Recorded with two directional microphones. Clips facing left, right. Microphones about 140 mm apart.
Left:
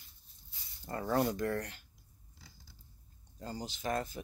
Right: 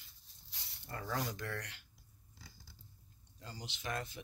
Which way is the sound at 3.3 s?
45° left (ahead or behind).